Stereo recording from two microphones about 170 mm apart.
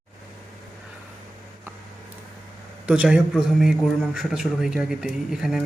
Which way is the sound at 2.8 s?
5° right (ahead or behind).